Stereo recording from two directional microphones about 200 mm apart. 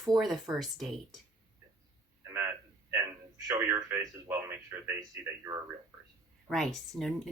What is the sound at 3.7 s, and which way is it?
Speech, 10° right (ahead or behind).